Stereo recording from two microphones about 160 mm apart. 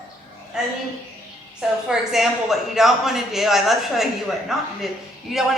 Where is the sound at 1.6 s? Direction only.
5° right (ahead or behind).